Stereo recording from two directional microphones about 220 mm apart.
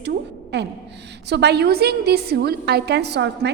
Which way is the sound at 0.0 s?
50° right (ahead or behind).